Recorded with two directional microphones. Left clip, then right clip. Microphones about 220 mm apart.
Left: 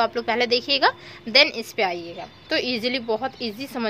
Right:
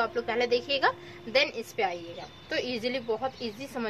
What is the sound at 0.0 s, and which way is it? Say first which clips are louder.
A woman's voice: left 6 dB; 50° left (ahead or behind).